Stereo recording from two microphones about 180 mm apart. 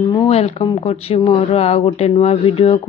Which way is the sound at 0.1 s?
30° left (ahead or behind).